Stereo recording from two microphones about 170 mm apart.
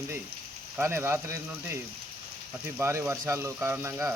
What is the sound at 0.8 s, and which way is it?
Speech, 15° right (ahead or behind).